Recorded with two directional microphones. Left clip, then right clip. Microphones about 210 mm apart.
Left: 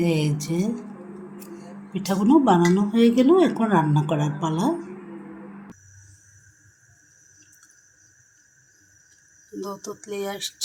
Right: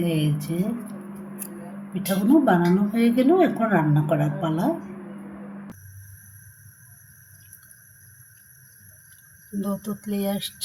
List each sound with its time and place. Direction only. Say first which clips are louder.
0.0 s speech: left 2 dB; 30° left (ahead or behind)
1.9 s speech: left 1 dB; 30° left (ahead or behind)
9.6 s speech: right 2 dB; 35° left (ahead or behind)